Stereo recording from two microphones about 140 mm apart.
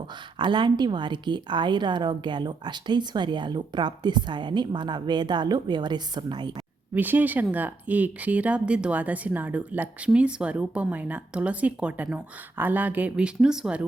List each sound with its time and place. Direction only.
0.3 s speech: 35° right (ahead or behind)
6.9 s speech: 15° right (ahead or behind)